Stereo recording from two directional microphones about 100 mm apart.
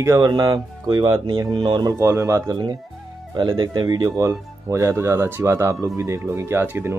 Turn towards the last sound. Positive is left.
turn(degrees=-20)  # may be behind; listen again after turning